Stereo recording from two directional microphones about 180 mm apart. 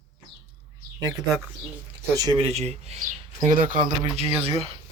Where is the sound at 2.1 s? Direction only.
25° right (ahead or behind).